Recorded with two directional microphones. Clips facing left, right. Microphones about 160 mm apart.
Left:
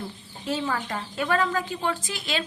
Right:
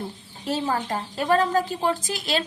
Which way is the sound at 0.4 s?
40° right (ahead or behind).